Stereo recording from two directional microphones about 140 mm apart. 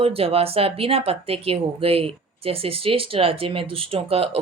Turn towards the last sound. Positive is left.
turn(degrees=-45)  # may be behind; listen again after turning